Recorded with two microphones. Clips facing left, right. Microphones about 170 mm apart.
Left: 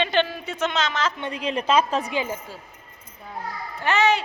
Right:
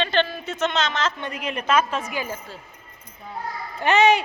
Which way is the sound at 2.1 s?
20° left (ahead or behind).